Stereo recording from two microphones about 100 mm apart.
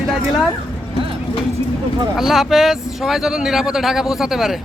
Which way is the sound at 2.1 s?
Centre (ahead or behind).